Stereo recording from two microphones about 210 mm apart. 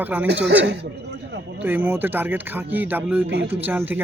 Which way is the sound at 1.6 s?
10° right (ahead or behind).